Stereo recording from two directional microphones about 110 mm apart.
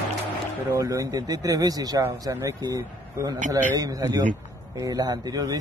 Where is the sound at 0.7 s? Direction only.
30° right (ahead or behind).